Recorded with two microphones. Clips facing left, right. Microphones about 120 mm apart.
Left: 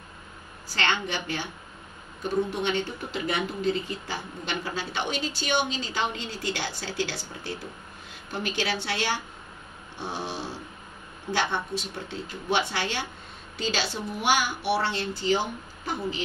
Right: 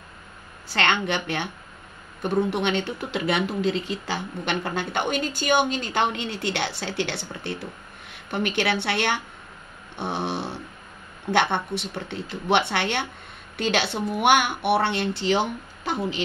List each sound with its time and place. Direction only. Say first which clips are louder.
0.7 s speech: right 5 dB; 65° right (ahead or behind)
9.9 s a sound: right 5 dB; 65° right (ahead or behind)
11.3 s speech: right 5 dB; 65° right (ahead or behind)